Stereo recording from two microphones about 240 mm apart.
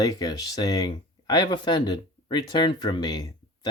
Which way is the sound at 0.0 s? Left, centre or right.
Centre.